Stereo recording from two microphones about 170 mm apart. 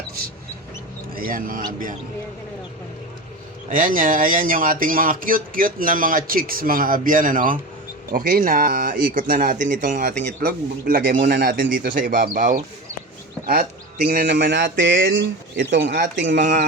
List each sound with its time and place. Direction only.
1.1 s speech: 55° right (ahead or behind)
3.7 s speech: 50° right (ahead or behind)
11.3 s speech: 80° right
11.9 s speech: 55° right (ahead or behind)
14.3 s speech: 75° right (ahead or behind); by 16.4 s 90° right